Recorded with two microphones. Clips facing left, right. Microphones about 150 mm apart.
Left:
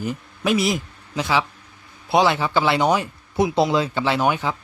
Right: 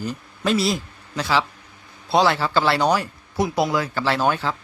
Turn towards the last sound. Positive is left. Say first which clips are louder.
# left 1 dB
turn(degrees=15)  # may be behind; listen again after turning